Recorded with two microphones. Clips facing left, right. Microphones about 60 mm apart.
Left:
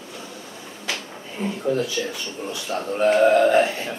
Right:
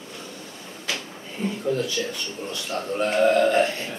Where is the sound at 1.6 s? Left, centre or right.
Centre.